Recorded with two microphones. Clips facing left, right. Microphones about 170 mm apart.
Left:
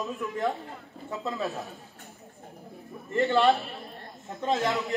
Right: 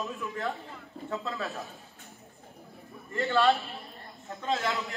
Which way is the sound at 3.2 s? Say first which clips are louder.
Left 3 dB; 20° left (ahead or behind).